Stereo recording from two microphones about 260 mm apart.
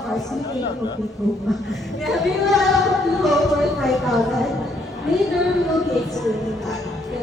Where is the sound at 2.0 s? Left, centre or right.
Centre.